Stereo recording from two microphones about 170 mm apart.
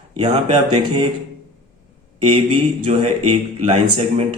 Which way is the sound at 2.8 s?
35° right (ahead or behind).